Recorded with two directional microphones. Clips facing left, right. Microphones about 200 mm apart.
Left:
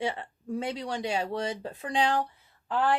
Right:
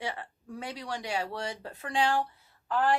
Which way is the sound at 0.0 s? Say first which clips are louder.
Left 5 dB; 25° left (ahead or behind).